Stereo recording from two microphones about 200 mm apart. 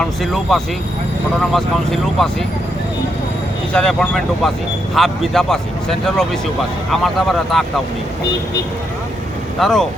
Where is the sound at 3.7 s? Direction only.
5° left (ahead or behind).